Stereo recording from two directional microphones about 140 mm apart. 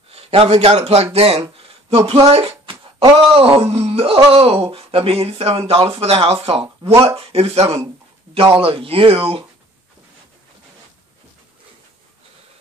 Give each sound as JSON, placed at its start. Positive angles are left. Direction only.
{"t": 0.1, "sound": "a man's voice", "side_deg": -45}
{"t": 2.6, "sound": "music", "side_deg": -40}
{"t": 3.3, "sound": "speech", "side_deg": -40}